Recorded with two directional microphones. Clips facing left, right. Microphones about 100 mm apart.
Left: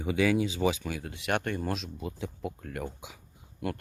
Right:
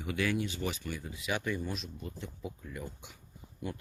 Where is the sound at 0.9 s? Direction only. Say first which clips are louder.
Left 4 dB; 85° left.